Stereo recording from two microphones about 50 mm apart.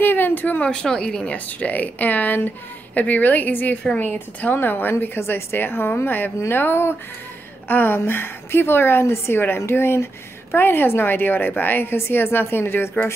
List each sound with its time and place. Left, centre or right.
0.0 s speech: left
0.6 s speech: centre
1.3 s a woman's voice: left
9.0 s a woman's voice: left